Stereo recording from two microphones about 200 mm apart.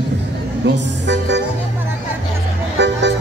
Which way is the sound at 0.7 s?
60° right (ahead or behind).